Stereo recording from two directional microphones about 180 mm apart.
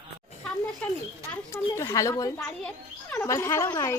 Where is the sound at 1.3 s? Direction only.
15° left (ahead or behind).